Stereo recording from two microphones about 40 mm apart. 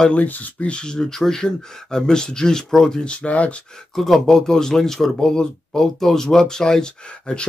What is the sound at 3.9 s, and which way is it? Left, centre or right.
Speech, centre.